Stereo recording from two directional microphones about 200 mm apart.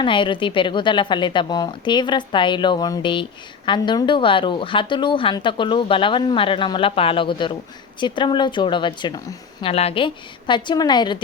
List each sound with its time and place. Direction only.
0.0 s a woman's voice: 25° left (ahead or behind)